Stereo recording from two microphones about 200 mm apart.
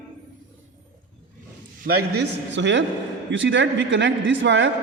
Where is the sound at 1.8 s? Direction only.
55° right (ahead or behind).